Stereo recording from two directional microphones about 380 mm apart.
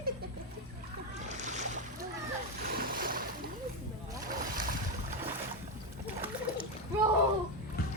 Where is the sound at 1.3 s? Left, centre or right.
Centre.